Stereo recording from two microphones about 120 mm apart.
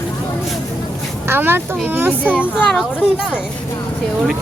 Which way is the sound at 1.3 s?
20° right (ahead or behind).